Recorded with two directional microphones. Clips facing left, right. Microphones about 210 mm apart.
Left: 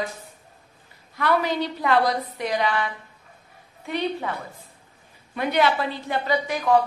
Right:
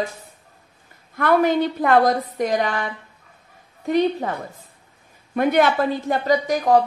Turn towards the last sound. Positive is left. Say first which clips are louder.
# right 3 dB
turn(degrees=-40)  # may be behind; listen again after turning